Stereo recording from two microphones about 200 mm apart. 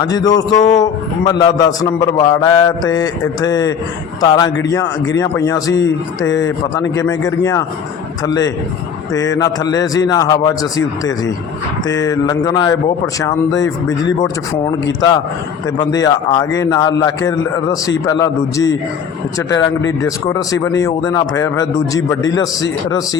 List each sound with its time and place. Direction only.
0.0 s a man's voice: 20° left (ahead or behind)
5.7 s speech: 70° left (ahead or behind)
6.3 s speech: 15° left (ahead or behind)
9.1 s a man's voice: 15° left (ahead or behind)
20.1 s speech: 15° left (ahead or behind)